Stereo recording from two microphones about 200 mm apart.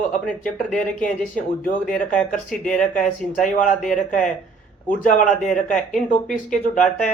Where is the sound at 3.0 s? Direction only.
40° left (ahead or behind).